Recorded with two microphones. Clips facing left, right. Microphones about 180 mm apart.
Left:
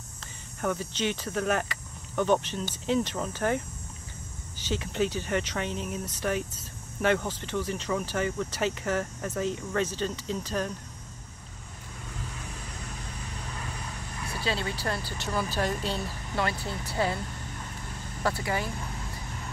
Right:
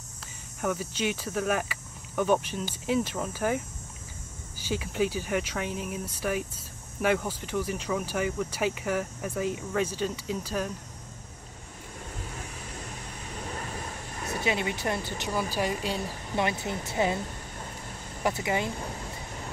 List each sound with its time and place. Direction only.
0.6 s speech: 5° right (ahead or behind)
14.3 s speech: 20° right (ahead or behind)
18.2 s speech: 20° right (ahead or behind)